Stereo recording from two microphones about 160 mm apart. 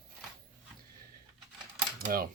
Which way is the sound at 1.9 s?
65° right (ahead or behind).